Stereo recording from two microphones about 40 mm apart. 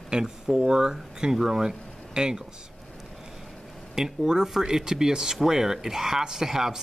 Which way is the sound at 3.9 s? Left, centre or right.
Centre.